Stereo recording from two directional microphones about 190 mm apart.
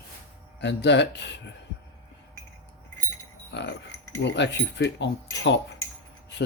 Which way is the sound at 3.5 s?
65° left (ahead or behind).